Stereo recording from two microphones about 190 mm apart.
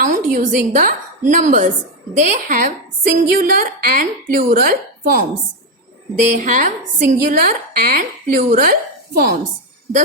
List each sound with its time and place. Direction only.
0.0 s a woman's voice: 45° right (ahead or behind)
6.3 s a woman's voice: 45° right (ahead or behind)